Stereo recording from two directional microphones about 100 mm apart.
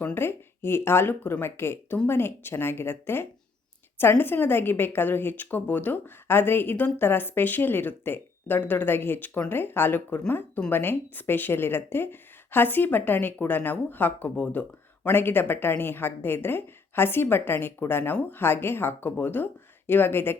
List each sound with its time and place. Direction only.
0.0 s a woman's voice: 20° left (ahead or behind)